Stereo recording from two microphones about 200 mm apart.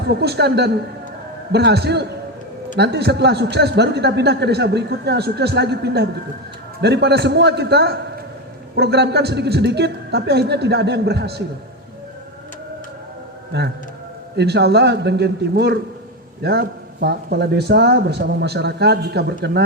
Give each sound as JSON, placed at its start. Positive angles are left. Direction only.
{"t": 0.1, "sound": "a man's voice", "side_deg": -55}
{"t": 14.3, "sound": "a man's voice", "side_deg": -55}